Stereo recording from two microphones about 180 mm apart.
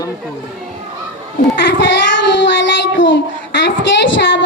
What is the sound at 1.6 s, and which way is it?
Child singing, 75° left (ahead or behind).